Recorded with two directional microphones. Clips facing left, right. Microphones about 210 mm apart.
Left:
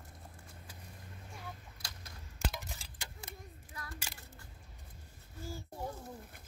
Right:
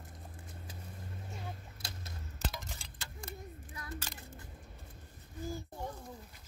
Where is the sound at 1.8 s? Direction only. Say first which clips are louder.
Right 4 dB; 25° right (ahead or behind).